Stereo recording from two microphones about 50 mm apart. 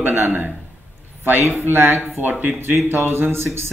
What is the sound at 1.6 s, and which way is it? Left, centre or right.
A man's voice, right.